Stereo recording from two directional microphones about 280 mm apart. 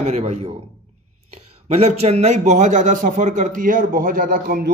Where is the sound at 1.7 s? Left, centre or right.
Right.